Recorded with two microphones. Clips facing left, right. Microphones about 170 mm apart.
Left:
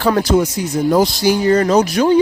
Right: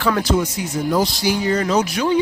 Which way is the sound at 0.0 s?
35° left (ahead or behind).